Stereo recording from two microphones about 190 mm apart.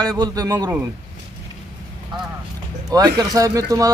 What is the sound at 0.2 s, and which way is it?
Speech, 20° right (ahead or behind).